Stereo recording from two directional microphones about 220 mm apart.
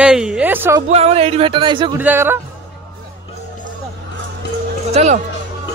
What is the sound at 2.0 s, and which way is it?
Speech, 10° right (ahead or behind).